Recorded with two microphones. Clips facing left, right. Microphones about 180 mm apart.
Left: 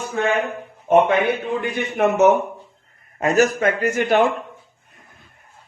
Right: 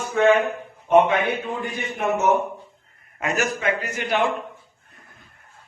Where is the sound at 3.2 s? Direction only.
40° left (ahead or behind).